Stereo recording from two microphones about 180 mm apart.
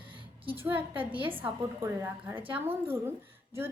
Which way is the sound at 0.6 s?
10° right (ahead or behind).